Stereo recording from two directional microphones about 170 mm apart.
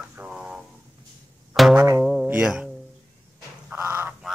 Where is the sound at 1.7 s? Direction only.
20° right (ahead or behind).